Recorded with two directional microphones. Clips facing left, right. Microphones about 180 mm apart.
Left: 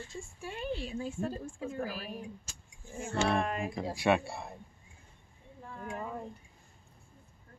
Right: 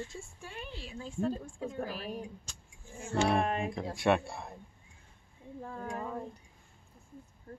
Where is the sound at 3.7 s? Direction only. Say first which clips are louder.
Even; centre (ahead or behind).